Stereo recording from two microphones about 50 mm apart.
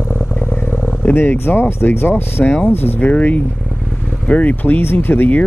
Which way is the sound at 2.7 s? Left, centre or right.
Left.